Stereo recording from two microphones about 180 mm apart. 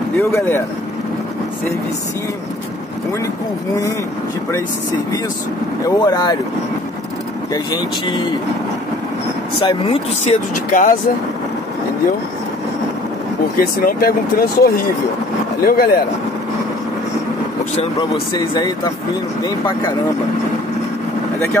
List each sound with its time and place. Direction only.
0.2 s speech: 15° left (ahead or behind)
5.9 s speech: 20° left (ahead or behind)
7.5 s speech: 25° left (ahead or behind)
9.6 s speech: 30° left (ahead or behind)
10.7 s speech: 50° left (ahead or behind)
13.6 s speech: 55° left (ahead or behind)